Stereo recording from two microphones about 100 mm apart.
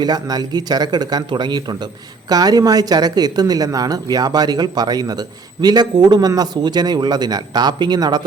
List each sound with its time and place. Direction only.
0.0 s a man's voice: 45° right (ahead or behind)